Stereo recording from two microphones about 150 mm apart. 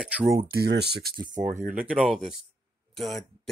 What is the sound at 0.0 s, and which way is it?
Speech, 10° right (ahead or behind).